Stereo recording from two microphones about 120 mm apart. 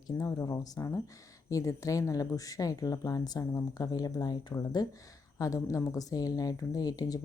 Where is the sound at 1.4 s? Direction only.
30° left (ahead or behind).